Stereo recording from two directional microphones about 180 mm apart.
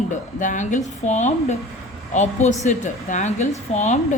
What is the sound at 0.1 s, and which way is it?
Speech, 45° left (ahead or behind).